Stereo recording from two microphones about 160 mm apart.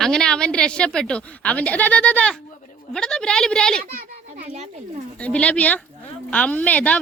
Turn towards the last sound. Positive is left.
turn(degrees=10)  # may be behind; listen again after turning